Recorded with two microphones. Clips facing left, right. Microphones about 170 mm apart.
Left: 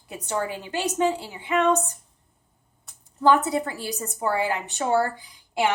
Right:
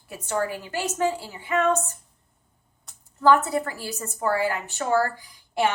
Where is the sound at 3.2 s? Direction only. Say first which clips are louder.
Even; 15° left (ahead or behind).